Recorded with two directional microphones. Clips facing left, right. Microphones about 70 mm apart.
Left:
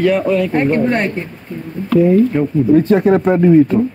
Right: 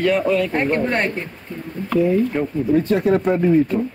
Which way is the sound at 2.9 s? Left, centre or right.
Left.